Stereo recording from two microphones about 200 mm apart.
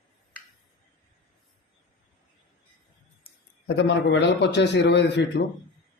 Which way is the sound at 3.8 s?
60° left (ahead or behind).